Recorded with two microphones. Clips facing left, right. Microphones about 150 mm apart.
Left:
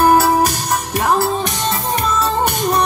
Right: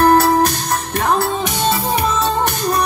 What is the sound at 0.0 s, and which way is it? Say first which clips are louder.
Music: even; 10° left (ahead or behind).